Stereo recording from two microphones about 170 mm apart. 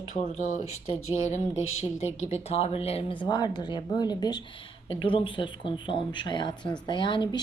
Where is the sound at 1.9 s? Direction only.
40° left (ahead or behind).